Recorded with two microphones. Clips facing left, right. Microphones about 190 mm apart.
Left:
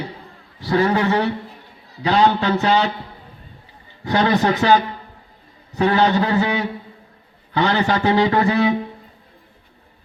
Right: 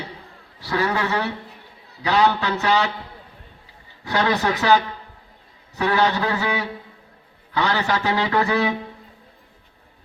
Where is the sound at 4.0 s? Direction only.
30° left (ahead or behind).